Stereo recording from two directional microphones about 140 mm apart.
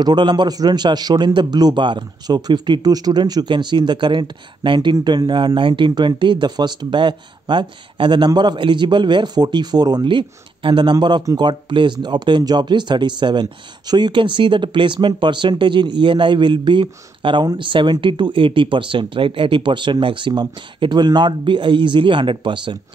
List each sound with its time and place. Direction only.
0.0 s speech: 30° right (ahead or behind)